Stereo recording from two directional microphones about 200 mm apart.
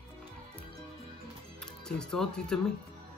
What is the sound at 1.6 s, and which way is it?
Speech, 5° left (ahead or behind).